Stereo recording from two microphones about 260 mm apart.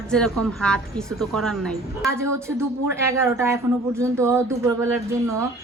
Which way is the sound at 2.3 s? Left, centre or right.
Centre.